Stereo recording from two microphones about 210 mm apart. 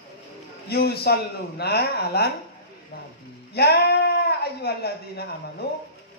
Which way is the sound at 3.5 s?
50° left (ahead or behind).